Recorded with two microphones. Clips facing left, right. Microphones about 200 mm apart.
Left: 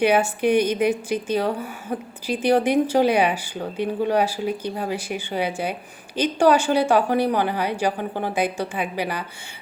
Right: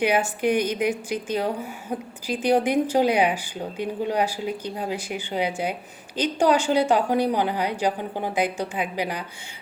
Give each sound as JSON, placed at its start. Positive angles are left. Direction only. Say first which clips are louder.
{"t": 0.0, "sound": "a woman's voice", "louder": "left 3 dB", "side_deg": -10}